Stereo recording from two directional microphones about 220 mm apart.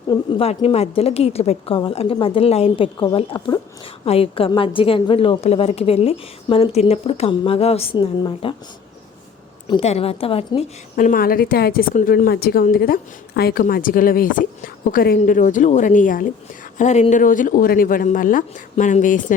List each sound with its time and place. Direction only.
0.1 s a woman's voice: 20° left (ahead or behind)
9.6 s a woman's voice: 25° left (ahead or behind)